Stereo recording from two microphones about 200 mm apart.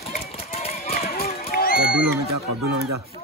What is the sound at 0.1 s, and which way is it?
Run, 30° left (ahead or behind).